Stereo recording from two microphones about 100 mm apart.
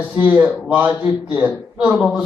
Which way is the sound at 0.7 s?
15° right (ahead or behind).